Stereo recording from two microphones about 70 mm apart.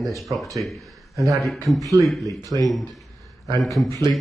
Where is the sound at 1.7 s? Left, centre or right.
Right.